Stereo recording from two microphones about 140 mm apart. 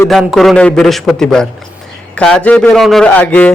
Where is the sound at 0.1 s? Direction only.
Centre (ahead or behind).